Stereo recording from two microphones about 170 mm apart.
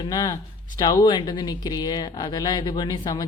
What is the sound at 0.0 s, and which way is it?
Speech, 20° left (ahead or behind).